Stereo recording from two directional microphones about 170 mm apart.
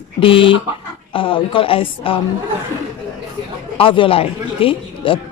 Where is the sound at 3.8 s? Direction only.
30° left (ahead or behind).